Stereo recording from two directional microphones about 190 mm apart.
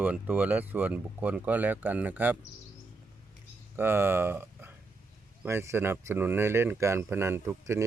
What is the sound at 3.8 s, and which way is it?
Speech, 10° right (ahead or behind).